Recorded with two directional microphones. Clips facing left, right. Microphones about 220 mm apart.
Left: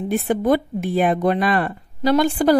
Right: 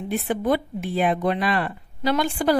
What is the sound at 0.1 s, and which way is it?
A woman's voice, 45° left (ahead or behind).